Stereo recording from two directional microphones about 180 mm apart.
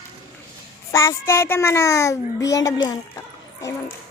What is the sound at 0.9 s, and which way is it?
A child's voice, 15° left (ahead or behind).